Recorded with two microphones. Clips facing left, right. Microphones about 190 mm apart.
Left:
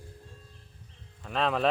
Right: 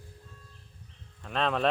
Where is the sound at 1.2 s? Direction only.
Centre (ahead or behind).